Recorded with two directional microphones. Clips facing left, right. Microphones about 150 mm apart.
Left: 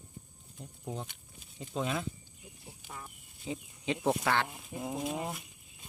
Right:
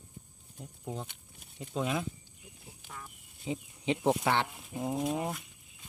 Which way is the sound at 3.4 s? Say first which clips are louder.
Right 3 dB; 20° right (ahead or behind).